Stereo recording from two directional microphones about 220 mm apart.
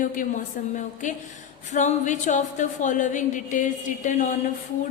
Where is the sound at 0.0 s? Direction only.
35° left (ahead or behind).